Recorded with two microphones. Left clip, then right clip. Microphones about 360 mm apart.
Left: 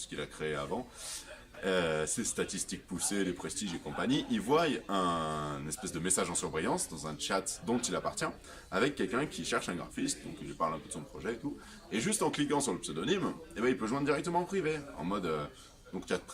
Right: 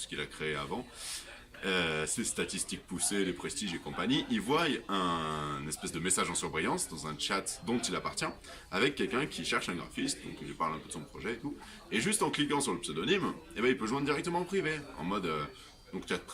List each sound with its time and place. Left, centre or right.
0.1 s speech: centre
1.6 s speech: centre